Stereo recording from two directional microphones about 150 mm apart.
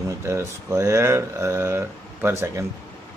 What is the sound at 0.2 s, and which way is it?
Speech, 20° right (ahead or behind).